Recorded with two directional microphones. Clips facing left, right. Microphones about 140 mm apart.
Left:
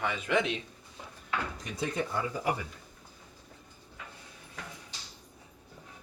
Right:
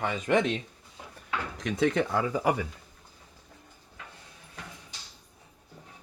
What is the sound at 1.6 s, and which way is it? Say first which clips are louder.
Speech: right 8 dB; 90° right.